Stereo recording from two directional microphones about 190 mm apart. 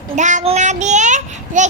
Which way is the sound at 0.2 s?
40° right (ahead or behind).